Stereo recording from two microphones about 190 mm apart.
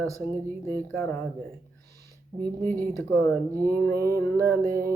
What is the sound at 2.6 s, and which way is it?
Speech, 10° left (ahead or behind).